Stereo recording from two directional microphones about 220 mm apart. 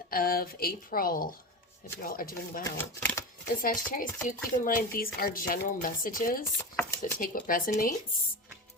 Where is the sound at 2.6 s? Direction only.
10° left (ahead or behind).